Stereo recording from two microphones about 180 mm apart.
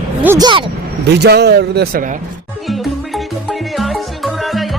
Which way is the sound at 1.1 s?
65° right (ahead or behind).